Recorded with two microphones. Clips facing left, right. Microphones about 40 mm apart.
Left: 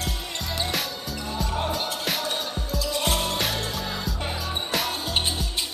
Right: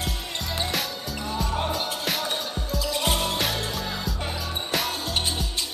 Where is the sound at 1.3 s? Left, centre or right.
Centre.